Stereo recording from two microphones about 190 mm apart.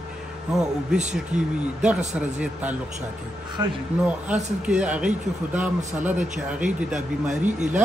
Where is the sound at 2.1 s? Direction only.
5° right (ahead or behind).